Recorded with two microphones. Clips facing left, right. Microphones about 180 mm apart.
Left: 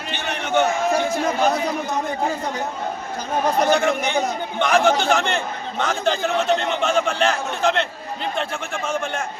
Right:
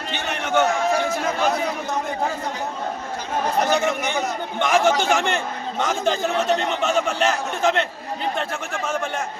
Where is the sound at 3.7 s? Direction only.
5° right (ahead or behind).